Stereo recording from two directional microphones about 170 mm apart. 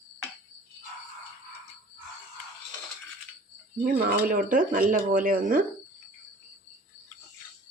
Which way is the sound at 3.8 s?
55° right (ahead or behind).